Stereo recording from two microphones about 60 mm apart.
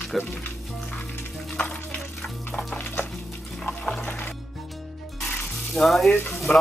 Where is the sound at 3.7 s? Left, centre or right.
Centre.